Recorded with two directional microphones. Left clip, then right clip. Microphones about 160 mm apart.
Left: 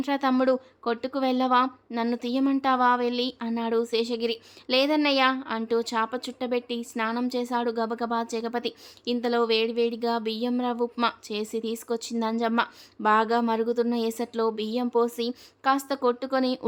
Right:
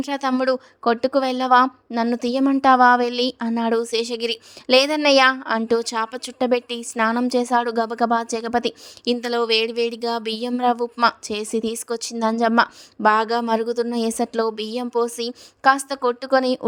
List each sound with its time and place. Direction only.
0.0 s a woman's voice: 40° right (ahead or behind)